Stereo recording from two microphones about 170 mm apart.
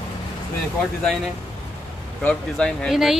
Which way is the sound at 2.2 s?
5° left (ahead or behind).